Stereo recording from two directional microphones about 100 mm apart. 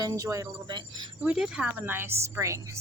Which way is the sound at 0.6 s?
50° right (ahead or behind).